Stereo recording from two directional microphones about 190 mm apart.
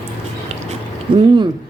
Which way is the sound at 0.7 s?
25° right (ahead or behind).